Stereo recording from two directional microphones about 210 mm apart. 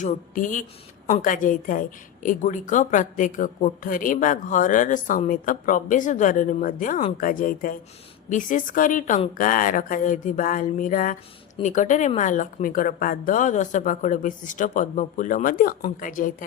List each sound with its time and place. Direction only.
0.0 s a woman's voice: 40° left (ahead or behind)